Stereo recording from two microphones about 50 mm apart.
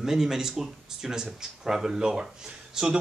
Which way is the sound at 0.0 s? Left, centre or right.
Centre.